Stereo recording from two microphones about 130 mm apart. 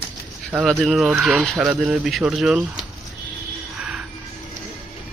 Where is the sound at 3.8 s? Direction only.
10° right (ahead or behind).